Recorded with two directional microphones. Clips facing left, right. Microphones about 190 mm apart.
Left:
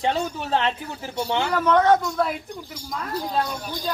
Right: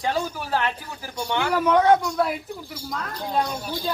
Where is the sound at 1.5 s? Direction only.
10° right (ahead or behind).